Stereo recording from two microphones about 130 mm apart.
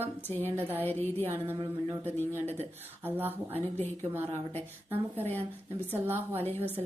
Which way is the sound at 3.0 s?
15° right (ahead or behind).